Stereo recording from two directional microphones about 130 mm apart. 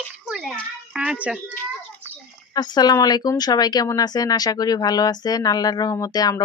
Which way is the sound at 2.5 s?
30° left (ahead or behind).